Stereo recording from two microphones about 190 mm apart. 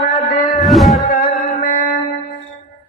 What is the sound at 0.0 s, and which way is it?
Music, 45° left (ahead or behind).